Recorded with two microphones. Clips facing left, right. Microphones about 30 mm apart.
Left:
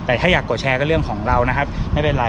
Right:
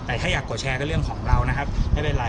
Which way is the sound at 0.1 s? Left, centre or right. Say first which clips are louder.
Left 9 dB; left.